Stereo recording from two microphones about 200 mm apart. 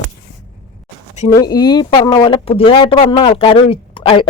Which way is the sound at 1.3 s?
20° left (ahead or behind).